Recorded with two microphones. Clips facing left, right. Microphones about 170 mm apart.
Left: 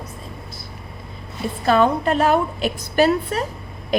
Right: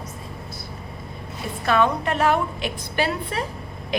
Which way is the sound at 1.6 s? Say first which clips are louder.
Left 4 dB; 35° left (ahead or behind).